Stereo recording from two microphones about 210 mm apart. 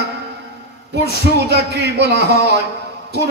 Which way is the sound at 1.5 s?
55° right (ahead or behind).